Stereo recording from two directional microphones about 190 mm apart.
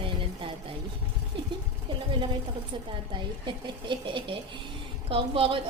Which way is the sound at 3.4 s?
25° right (ahead or behind).